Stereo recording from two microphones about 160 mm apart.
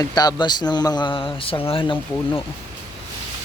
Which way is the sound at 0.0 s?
25° left (ahead or behind).